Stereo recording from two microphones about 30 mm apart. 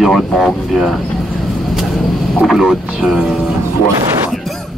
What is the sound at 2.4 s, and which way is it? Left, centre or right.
Speech, centre.